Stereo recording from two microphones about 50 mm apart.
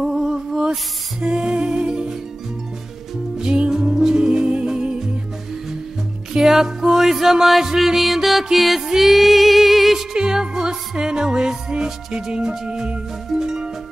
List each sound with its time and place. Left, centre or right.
0.0 s music: centre
3.3 s music: centre
6.3 s music: centre
10.1 s music: centre